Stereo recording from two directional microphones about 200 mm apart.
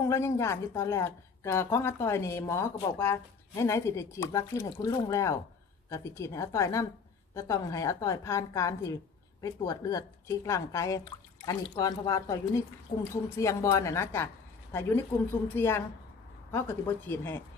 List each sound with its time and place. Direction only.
0.1 s a woman's voice: 15° left (ahead or behind)
17.0 s a woman's voice: 10° left (ahead or behind)